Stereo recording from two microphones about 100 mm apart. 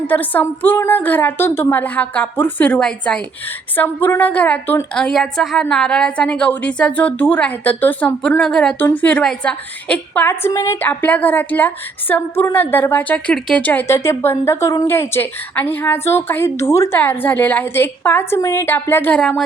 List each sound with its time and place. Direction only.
0.1 s a woman's voice: 20° left (ahead or behind)
3.8 s a woman's voice: 20° left (ahead or behind)
4.9 s a woman's voice: 5° left (ahead or behind)
10.2 s a woman's voice: 25° left (ahead or behind)
13.8 s a woman's voice: 25° left (ahead or behind)